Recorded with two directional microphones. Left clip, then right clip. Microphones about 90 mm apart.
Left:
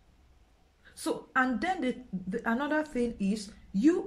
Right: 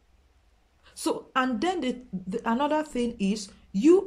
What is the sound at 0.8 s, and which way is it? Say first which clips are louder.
A woman's voice: right 5 dB; 30° right (ahead or behind).